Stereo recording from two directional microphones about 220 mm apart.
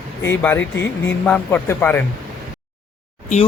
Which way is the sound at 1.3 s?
10° left (ahead or behind).